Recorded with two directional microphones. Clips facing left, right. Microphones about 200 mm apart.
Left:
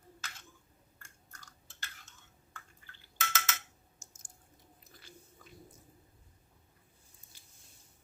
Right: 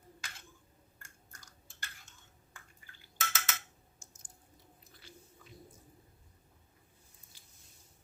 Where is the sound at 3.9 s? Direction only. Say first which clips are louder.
Right 1 dB; 45° left (ahead or behind).